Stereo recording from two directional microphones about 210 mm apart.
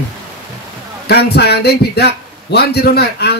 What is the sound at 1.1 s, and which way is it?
A man's voice, 50° left (ahead or behind).